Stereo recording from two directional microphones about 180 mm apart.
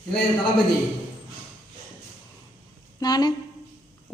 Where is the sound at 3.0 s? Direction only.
20° left (ahead or behind).